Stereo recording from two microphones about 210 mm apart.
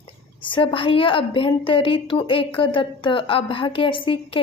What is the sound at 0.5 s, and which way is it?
A woman's voice, 25° left (ahead or behind).